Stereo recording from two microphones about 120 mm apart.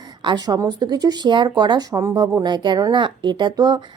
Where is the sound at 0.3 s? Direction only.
35° right (ahead or behind).